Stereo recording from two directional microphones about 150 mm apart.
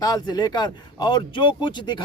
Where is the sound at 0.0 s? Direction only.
25° left (ahead or behind).